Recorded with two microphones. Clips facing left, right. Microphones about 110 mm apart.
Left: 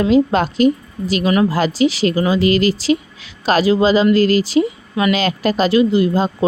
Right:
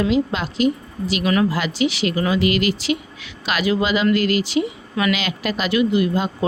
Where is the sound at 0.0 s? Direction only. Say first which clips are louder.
Left 6 dB; 45° left (ahead or behind).